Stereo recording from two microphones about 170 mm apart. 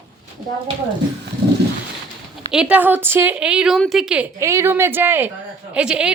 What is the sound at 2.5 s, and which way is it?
A woman's voice, 5° right (ahead or behind).